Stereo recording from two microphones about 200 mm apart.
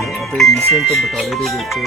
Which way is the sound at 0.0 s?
Centre (ahead or behind).